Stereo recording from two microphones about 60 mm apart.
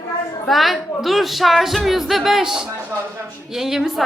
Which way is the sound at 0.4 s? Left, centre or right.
Centre.